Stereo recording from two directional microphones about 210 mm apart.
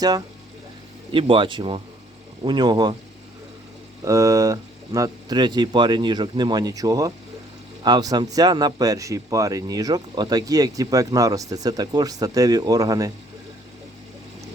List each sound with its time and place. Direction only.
1.1 s speech: 25° right (ahead or behind)
4.0 s speech: 15° right (ahead or behind)